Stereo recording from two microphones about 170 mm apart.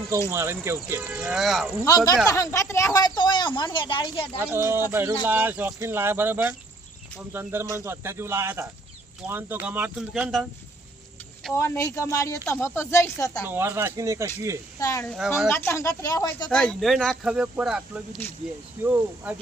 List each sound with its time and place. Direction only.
0.3 s speech: 15° right (ahead or behind)
1.2 s speech: centre (ahead or behind)
1.8 s speech: 20° left (ahead or behind)
4.4 s speech: 15° right (ahead or behind)
11.5 s speech: 15° left (ahead or behind)
13.5 s speech: 15° right (ahead or behind)
14.8 s speech: 20° left (ahead or behind)
16.5 s speech: 5° left (ahead or behind); by 19.4 s 10° right (ahead or behind)